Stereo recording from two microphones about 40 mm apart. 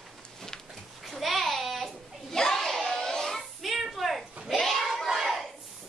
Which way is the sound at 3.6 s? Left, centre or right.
Centre.